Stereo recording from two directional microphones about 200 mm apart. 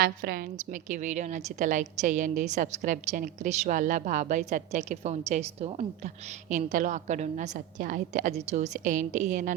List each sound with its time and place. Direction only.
0.0 s a woman's voice: 50° right (ahead or behind)